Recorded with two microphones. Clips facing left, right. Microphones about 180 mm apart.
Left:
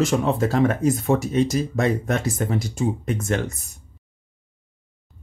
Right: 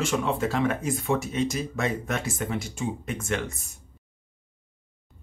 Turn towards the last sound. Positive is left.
turn(degrees=40)  # may be behind; listen again after turning